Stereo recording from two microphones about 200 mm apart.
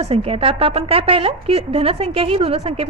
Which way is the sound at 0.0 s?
30° right (ahead or behind).